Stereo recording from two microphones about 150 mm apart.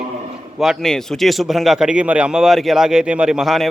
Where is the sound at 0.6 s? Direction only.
Centre (ahead or behind).